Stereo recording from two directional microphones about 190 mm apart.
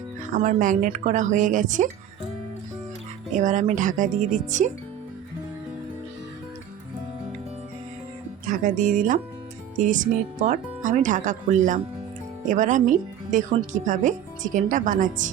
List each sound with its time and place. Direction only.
0.3 s speech: 40° right (ahead or behind)
3.3 s speech: 40° right (ahead or behind)
8.6 s speech: 40° right (ahead or behind)